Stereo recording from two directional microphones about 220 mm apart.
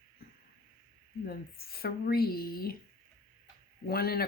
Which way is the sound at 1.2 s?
45° left (ahead or behind).